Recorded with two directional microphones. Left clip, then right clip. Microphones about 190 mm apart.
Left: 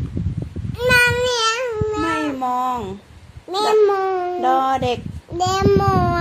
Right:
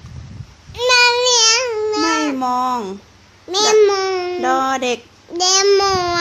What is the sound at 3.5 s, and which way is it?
Babbling, 15° right (ahead or behind).